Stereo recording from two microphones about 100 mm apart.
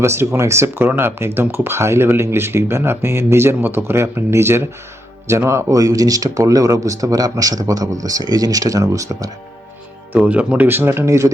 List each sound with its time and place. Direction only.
0.0 s speech: 25° right (ahead or behind)
10.2 s speech: 15° right (ahead or behind); by 11.3 s 30° right (ahead or behind)